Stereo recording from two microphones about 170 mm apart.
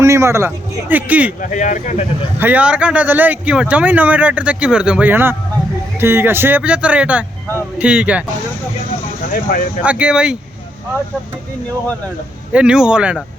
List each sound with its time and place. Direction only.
0.0 s a man's voice: 15° right (ahead or behind)
1.4 s speech: 50° left (ahead or behind)
2.4 s speech: 10° right (ahead or behind)
9.3 s speech: 55° left (ahead or behind)
9.8 s speech: 5° right (ahead or behind)
12.5 s speech: 5° right (ahead or behind)